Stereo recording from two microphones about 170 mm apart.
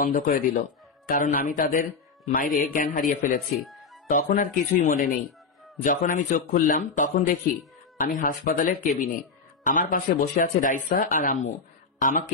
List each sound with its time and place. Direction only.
0.0 s speech: 55° left (ahead or behind)
3.6 s music: centre (ahead or behind)
4.1 s speech: 50° left (ahead or behind)
5.9 s speech: 50° left (ahead or behind)